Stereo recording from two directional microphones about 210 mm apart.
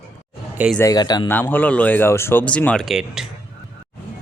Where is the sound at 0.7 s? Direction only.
15° left (ahead or behind).